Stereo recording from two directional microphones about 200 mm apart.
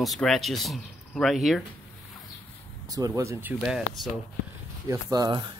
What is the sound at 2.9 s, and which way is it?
Speech, 20° right (ahead or behind).